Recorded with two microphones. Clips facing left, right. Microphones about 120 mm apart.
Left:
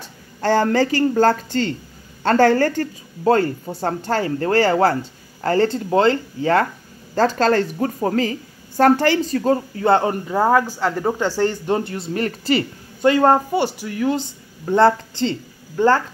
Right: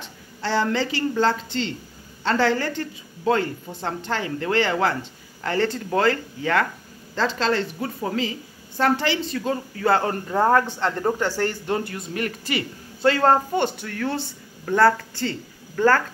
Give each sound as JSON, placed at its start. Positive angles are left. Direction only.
{"t": 0.4, "sound": "a woman's voice", "side_deg": 50}
{"t": 7.2, "sound": "a woman's voice", "side_deg": 45}
{"t": 9.8, "sound": "speech", "side_deg": 25}
{"t": 10.2, "sound": "speech", "side_deg": 10}
{"t": 13.0, "sound": "speech", "side_deg": 15}